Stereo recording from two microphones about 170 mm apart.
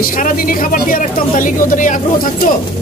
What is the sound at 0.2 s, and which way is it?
Speech, 55° left (ahead or behind).